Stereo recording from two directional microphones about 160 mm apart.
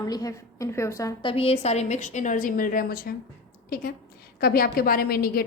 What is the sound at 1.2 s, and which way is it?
A woman's voice, 35° left (ahead or behind).